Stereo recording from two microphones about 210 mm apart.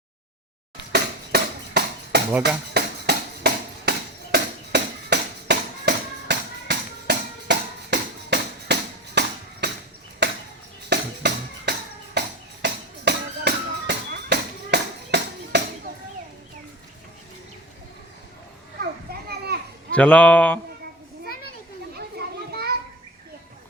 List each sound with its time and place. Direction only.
0.9 s a sound: 50° right (ahead or behind)
2.7 s music: 50° right (ahead or behind)
10.2 s chop: 55° right (ahead or behind)
10.8 s music: 55° right (ahead or behind)
19.9 s speech: 5° left (ahead or behind)
21.9 s children playing: 50° right (ahead or behind)